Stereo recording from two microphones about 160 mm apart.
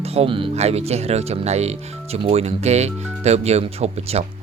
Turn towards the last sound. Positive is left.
turn(degrees=-40)  # may be behind; listen again after turning